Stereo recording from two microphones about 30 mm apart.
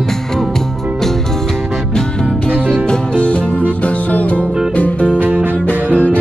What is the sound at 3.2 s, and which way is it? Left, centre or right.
Music, left.